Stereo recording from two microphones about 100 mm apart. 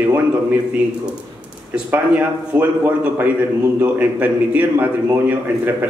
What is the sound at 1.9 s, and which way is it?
A man's voice, 15° right (ahead or behind).